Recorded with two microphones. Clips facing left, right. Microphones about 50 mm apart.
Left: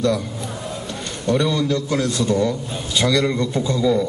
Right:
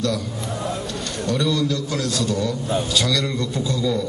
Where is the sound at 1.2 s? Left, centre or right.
Left.